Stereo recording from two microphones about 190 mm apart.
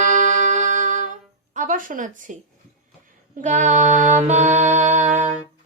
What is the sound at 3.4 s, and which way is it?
Music, 40° right (ahead or behind).